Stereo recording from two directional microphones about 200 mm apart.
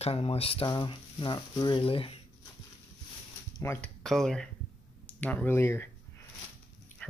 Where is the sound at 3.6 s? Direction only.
15° left (ahead or behind).